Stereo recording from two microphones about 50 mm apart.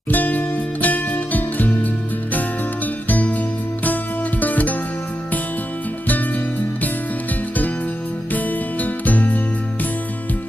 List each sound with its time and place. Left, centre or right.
0.1 s music: left
8.3 s music: left